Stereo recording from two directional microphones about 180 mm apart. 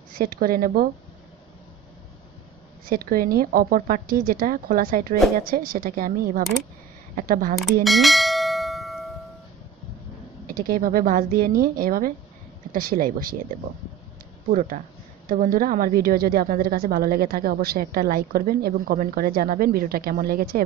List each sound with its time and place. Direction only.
0.1 s speech: 55° right (ahead or behind)
2.8 s speech: 55° right (ahead or behind)
7.8 s bell: centre (ahead or behind)
10.5 s speech: 50° right (ahead or behind)
14.5 s speech: 45° right (ahead or behind)